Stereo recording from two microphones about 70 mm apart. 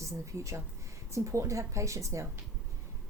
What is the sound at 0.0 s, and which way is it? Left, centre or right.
Speech, right.